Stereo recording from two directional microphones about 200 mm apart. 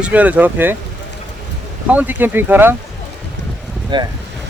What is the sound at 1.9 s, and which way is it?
Speech, 10° right (ahead or behind).